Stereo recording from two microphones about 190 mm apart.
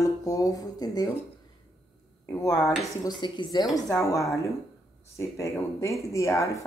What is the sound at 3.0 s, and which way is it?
Speech, 20° left (ahead or behind).